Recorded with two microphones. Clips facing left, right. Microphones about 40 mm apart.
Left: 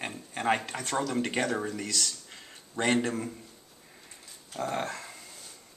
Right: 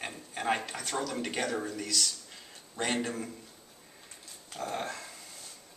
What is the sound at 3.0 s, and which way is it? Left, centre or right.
Speech, left.